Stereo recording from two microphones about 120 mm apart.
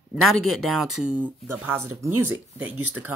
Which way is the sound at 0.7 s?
5° right (ahead or behind).